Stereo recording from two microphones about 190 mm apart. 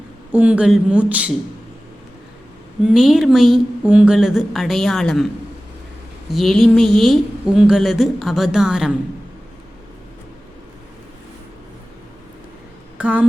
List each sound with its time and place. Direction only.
0.3 s a woman's voice: 10° right (ahead or behind)
2.8 s a woman's voice: centre (ahead or behind)
6.3 s a woman's voice: centre (ahead or behind)
13.0 s a sound: 5° right (ahead or behind)